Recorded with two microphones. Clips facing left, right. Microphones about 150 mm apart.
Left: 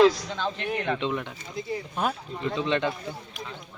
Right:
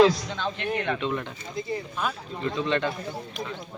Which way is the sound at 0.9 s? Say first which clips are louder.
Left 3 dB; 25° left (ahead or behind).